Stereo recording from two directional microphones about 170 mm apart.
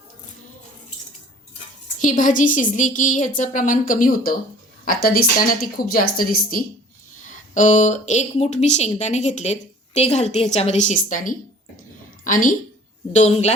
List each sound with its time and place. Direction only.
2.0 s speech: 50° left (ahead or behind)
7.3 s a woman's voice: 45° left (ahead or behind)
13.1 s a woman's voice: 40° left (ahead or behind)